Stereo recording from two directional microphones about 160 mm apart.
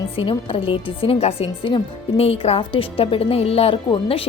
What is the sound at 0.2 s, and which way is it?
A woman's voice, 35° left (ahead or behind).